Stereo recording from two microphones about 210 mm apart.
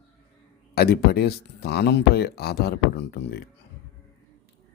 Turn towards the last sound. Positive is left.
turn(degrees=50)  # may be behind; listen again after turning